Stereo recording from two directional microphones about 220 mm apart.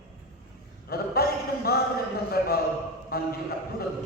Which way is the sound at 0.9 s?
45° left (ahead or behind).